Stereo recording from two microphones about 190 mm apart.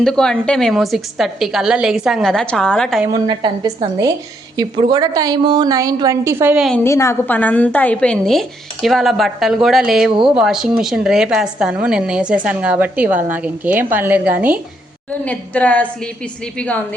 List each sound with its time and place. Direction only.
0.0 s a woman's voice: 5° left (ahead or behind)
3.1 s a woman's voice: 25° right (ahead or behind)
6.7 s a woman's voice: 10° left (ahead or behind); by 14.6 s 10° right (ahead or behind)
15.2 s a woman's voice: 10° left (ahead or behind)